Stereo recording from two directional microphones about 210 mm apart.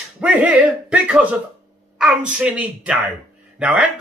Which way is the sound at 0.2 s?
5° right (ahead or behind).